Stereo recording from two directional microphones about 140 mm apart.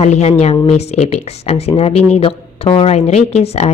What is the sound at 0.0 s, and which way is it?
A woman's voice, 50° left (ahead or behind).